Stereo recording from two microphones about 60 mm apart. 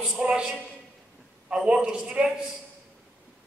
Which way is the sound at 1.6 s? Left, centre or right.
Centre.